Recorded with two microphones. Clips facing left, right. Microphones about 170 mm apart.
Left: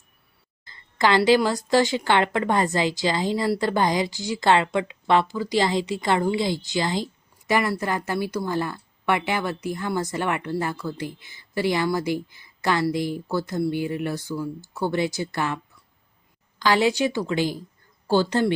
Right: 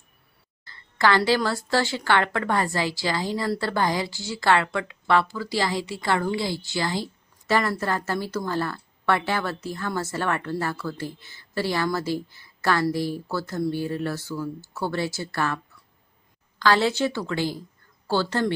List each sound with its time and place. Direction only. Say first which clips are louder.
0.6 s a woman's voice: even; 20° left (ahead or behind)